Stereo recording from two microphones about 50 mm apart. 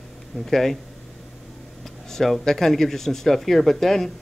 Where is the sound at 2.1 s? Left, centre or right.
Centre.